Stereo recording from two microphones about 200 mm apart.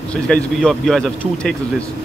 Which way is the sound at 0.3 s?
Centre (ahead or behind).